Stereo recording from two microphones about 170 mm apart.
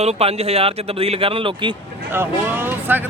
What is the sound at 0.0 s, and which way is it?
Speech, 35° right (ahead or behind).